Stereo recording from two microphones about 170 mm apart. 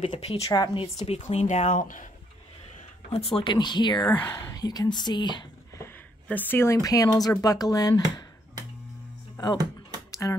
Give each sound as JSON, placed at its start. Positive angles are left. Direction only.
{"t": 0.0, "sound": "a woman's voice", "side_deg": 40}
{"t": 0.5, "sound": "a woman's voice", "side_deg": 30}
{"t": 3.1, "sound": "speech", "side_deg": 35}
{"t": 6.2, "sound": "speech", "side_deg": 10}
{"t": 10.2, "sound": "speech", "side_deg": 15}